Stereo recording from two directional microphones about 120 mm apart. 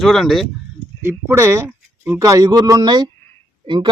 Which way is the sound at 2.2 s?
30° right (ahead or behind).